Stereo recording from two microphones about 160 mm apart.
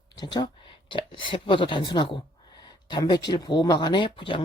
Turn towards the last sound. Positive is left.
turn(degrees=30)  # may be behind; listen again after turning